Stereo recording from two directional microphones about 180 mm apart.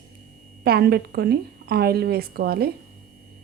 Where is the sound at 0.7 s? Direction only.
60° right (ahead or behind).